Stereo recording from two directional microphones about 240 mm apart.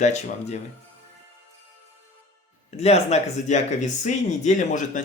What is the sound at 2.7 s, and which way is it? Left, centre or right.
Speech, left.